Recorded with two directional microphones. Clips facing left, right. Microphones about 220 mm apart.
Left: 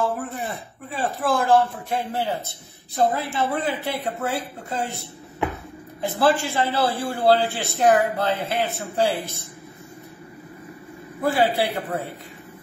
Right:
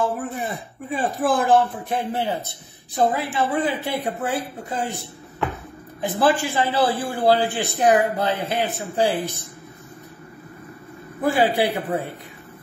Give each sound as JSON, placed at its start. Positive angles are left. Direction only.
{"t": 0.2, "sound": "a man's voice", "side_deg": -15}
{"t": 11.5, "sound": "a man's voice", "side_deg": -15}